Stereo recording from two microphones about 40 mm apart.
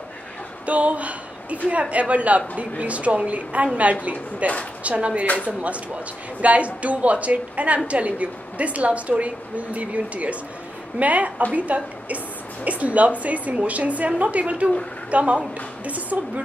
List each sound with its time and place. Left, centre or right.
0.7 s a woman's voice: right
5.2 s speech: left
5.5 s a woman's voice: right